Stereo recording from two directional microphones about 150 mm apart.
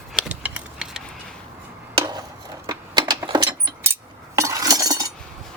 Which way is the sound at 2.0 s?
30° right (ahead or behind).